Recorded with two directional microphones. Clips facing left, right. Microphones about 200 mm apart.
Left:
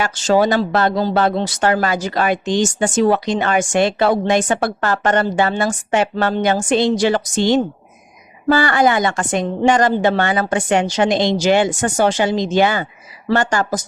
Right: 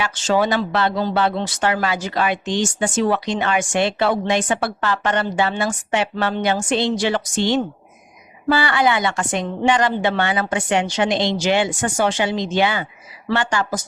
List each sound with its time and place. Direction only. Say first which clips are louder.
0.0 s speech: left 4 dB; 40° left (ahead or behind)